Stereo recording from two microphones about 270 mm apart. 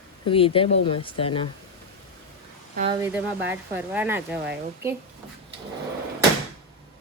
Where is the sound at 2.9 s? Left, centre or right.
Centre.